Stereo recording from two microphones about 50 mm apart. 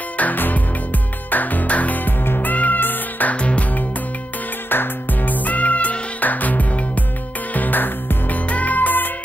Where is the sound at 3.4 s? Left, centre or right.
Left.